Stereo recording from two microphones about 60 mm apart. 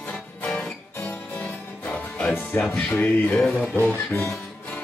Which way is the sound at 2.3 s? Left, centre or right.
Left.